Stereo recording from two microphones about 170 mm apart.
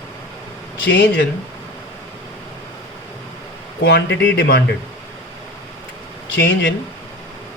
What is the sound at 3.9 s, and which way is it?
Speech, 90° left.